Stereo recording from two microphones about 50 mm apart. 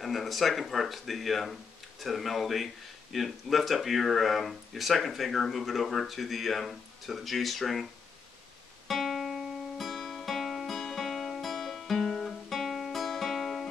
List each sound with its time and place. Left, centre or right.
0.0 s speech: centre
8.8 s music: centre